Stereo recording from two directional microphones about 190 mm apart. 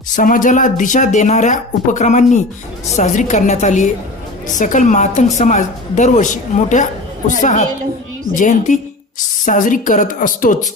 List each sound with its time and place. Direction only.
0.2 s a woman's voice: 45° left (ahead or behind)